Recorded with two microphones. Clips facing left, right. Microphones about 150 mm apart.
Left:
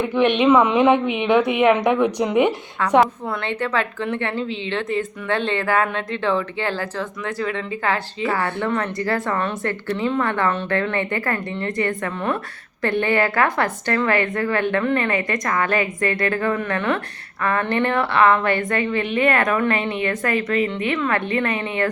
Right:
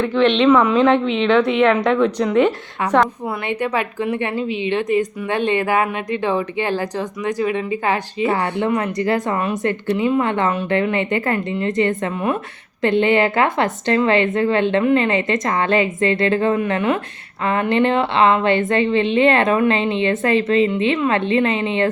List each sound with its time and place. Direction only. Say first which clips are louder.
0.0 s a woman's voice: right 2 dB; 15° left (ahead or behind)
3.4 s a woman's voice: right 2 dB; 15° right (ahead or behind)